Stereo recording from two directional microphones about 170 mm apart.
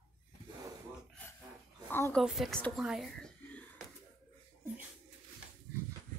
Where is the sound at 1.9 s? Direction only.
15° left (ahead or behind).